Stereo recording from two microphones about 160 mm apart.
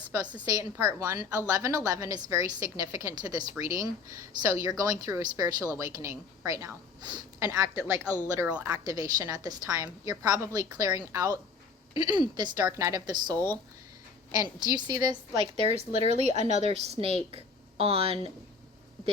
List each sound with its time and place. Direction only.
0.1 s a woman's voice: 25° right (ahead or behind)
13.3 s speech: 10° left (ahead or behind)
14.3 s a woman's voice: 25° right (ahead or behind)
15.7 s a woman's voice: 45° right (ahead or behind)